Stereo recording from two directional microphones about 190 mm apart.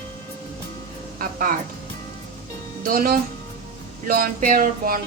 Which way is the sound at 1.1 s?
45° right (ahead or behind).